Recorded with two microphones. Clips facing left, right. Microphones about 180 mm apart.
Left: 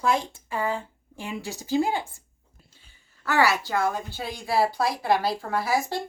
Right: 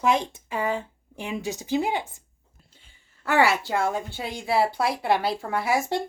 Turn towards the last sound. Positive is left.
turn(degrees=-25)  # may be behind; listen again after turning